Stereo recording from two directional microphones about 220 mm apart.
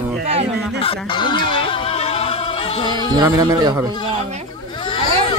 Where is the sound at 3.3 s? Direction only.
15° right (ahead or behind).